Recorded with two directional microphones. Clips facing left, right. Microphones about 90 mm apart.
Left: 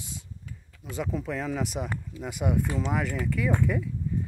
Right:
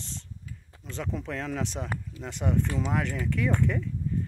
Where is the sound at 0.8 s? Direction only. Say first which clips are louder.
Left 3 dB; 5° left (ahead or behind).